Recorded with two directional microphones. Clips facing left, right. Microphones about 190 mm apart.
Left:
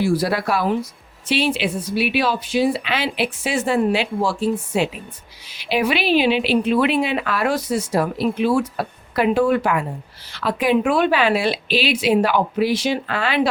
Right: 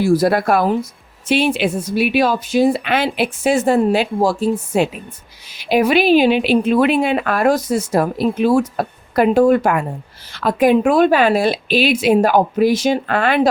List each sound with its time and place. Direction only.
0.0 s speech: 45° right (ahead or behind)